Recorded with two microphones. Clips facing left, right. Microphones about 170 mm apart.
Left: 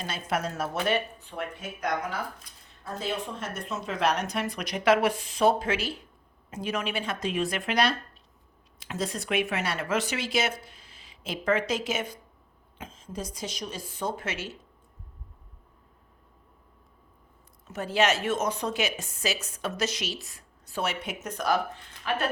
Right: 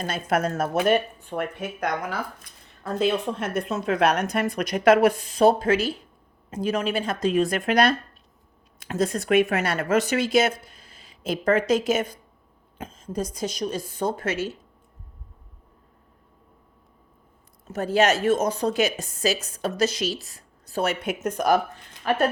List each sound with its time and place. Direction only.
0.0 s speech: 50° right (ahead or behind)
2.4 s a woman's voice: 65° right (ahead or behind); by 14.5 s 40° right (ahead or behind)
17.7 s a woman's voice: 40° right (ahead or behind)